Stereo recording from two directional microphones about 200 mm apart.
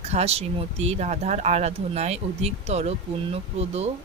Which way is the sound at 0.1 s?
30° right (ahead or behind).